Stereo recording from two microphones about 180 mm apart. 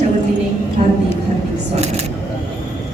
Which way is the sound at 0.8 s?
45° right (ahead or behind).